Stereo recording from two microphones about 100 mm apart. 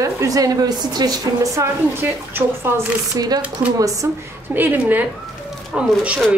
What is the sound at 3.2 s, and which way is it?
Speech, 40° right (ahead or behind).